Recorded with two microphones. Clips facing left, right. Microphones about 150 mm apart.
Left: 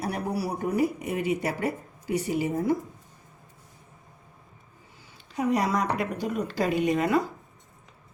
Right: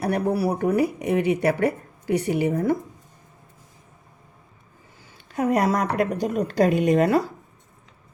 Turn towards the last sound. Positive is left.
turn(degrees=-45)  # may be behind; listen again after turning